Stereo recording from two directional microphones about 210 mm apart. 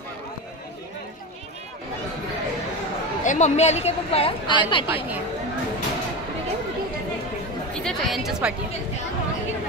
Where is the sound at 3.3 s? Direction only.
35° left (ahead or behind).